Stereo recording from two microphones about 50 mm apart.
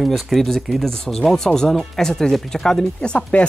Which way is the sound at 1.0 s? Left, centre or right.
Centre.